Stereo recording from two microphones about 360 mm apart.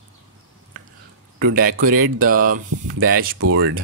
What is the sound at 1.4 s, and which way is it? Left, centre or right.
Speech, right.